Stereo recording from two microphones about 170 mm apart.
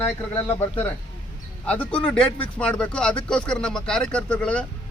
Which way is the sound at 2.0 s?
5° left (ahead or behind).